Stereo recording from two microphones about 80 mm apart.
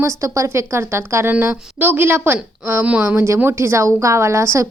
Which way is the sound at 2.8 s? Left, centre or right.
Centre.